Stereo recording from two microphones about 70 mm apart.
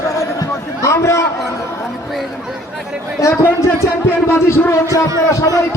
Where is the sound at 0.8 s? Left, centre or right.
Left.